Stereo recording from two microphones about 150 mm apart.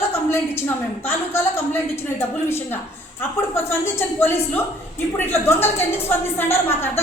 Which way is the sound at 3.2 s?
15° left (ahead or behind).